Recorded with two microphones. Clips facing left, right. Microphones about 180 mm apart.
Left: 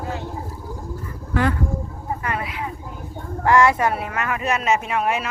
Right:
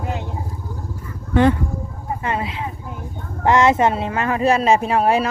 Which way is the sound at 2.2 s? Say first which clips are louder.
Right 5 dB; 25° right (ahead or behind).